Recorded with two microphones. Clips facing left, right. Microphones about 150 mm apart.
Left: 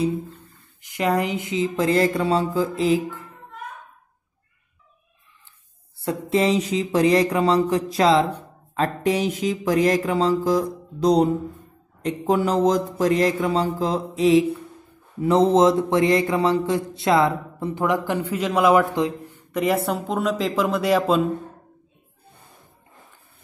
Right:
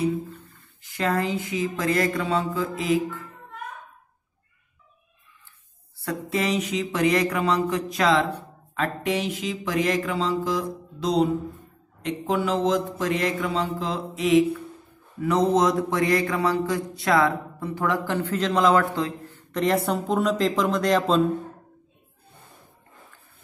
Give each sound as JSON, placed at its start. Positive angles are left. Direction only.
{"t": 0.8, "sound": "speech", "side_deg": 15}
{"t": 5.9, "sound": "a sound", "side_deg": 25}
{"t": 15.1, "sound": "a man's voice", "side_deg": 25}